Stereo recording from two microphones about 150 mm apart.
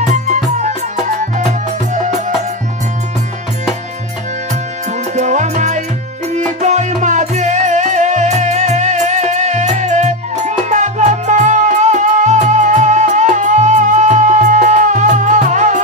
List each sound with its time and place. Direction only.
0.0 s music: 50° right (ahead or behind)
5.1 s music: 50° right (ahead or behind)